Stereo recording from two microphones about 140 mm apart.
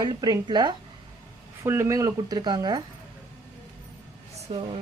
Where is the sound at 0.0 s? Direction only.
30° right (ahead or behind).